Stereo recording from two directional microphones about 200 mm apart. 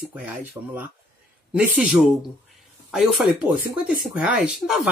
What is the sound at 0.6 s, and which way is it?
Speech, 20° right (ahead or behind).